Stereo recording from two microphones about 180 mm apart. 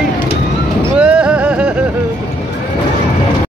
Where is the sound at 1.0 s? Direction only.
5° right (ahead or behind).